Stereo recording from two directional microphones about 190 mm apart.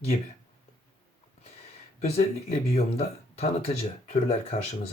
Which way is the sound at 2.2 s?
35° left (ahead or behind).